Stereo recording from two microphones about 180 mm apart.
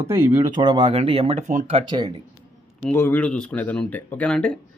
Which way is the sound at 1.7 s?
25° right (ahead or behind).